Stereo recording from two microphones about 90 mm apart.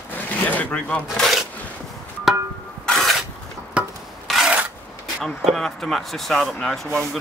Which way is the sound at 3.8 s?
15° right (ahead or behind).